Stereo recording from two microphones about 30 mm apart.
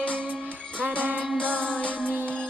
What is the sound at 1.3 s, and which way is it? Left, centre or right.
Music, left.